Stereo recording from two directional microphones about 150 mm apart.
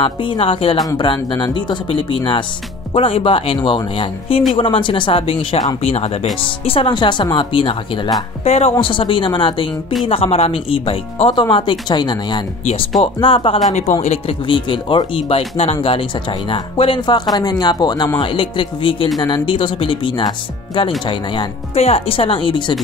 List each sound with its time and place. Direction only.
0.0 s speech: 35° left (ahead or behind)
0.7 s speech: 25° left (ahead or behind)
21.7 s speech: 40° left (ahead or behind)